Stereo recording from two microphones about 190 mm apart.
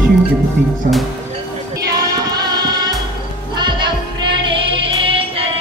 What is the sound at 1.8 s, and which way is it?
Child singing, 20° right (ahead or behind).